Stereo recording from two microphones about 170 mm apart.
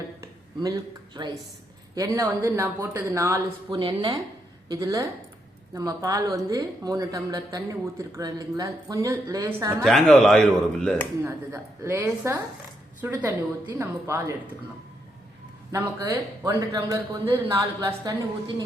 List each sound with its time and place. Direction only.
0.6 s a woman's voice: 25° right (ahead or behind)
3.7 s a woman's voice: 30° right (ahead or behind)
9.8 s a man's voice: centre (ahead or behind)
11.2 s speech: 15° right (ahead or behind)
15.7 s speech: 15° right (ahead or behind)